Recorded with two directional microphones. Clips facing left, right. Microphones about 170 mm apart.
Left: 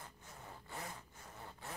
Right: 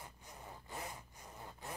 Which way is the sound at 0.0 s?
15° right (ahead or behind).